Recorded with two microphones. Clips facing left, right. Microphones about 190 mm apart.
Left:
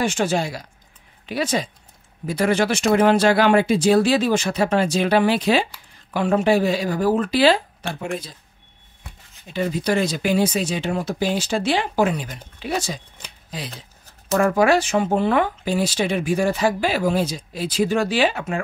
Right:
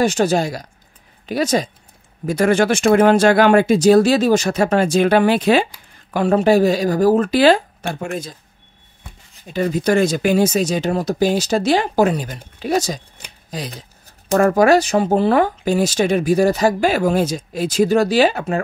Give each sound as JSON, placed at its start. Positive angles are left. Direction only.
{"t": 0.0, "sound": "speech", "side_deg": -40}
{"t": 6.1, "sound": "speech", "side_deg": -40}
{"t": 9.5, "sound": "speech", "side_deg": -45}